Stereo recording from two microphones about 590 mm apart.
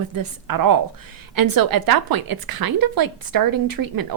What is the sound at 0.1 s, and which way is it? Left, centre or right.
A woman's voice, right.